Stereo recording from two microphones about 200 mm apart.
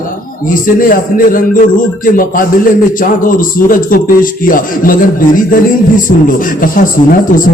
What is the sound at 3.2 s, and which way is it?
Music, 45° left (ahead or behind).